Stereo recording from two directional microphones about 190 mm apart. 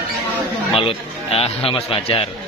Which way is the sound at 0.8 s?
30° left (ahead or behind).